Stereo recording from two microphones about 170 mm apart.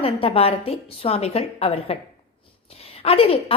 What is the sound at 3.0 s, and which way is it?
Speech, 35° left (ahead or behind).